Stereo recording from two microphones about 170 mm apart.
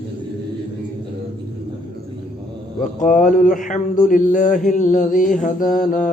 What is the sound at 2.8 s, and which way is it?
Mantra, 50° left (ahead or behind).